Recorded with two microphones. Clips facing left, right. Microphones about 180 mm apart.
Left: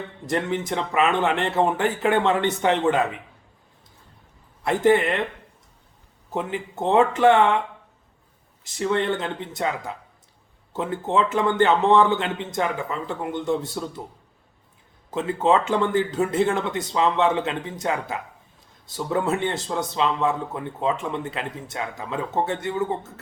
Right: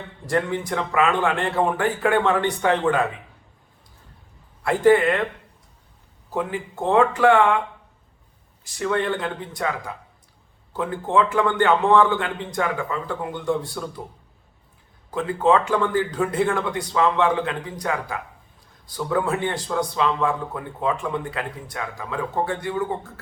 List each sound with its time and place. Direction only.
0.3 s a man's voice: 20° left (ahead or behind)
4.6 s a man's voice: 20° left (ahead or behind)
6.3 s a man's voice: 20° left (ahead or behind)
8.6 s a man's voice: 25° left (ahead or behind)
15.1 s a man's voice: 20° left (ahead or behind)